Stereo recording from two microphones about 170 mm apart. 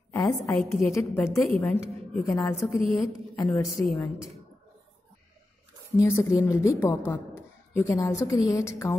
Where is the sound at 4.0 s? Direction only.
Centre (ahead or behind).